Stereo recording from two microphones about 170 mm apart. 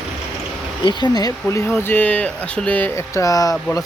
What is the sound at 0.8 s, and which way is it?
Speech, 25° left (ahead or behind).